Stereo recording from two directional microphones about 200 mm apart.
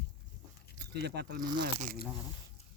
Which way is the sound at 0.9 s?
55° right (ahead or behind).